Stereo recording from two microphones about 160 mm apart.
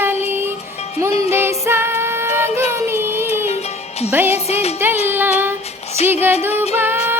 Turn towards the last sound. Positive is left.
turn(degrees=-15)  # may be behind; listen again after turning